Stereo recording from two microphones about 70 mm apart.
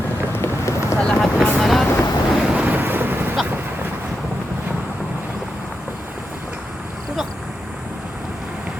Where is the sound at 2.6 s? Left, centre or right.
Right.